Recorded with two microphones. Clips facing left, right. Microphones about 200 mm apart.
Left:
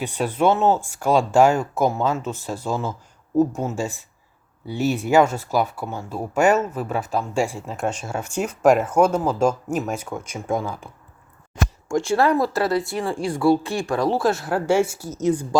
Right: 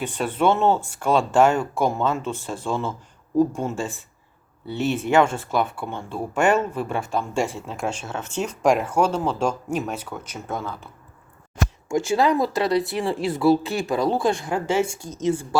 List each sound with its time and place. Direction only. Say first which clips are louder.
0.0 s speech: left 1 dB; 10° left (ahead or behind)
12.3 s speech: even; centre (ahead or behind)
13.2 s speech: even; 20° right (ahead or behind)
13.5 s speech: even; centre (ahead or behind)